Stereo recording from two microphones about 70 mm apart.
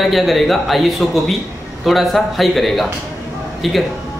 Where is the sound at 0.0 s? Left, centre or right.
Centre.